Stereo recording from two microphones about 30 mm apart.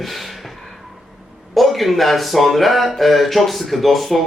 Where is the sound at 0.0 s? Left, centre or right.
Centre.